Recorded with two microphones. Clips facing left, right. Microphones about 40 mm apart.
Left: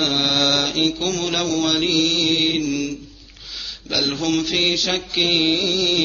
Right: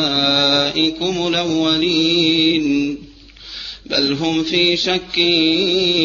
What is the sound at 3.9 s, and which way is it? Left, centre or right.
Mantra, right.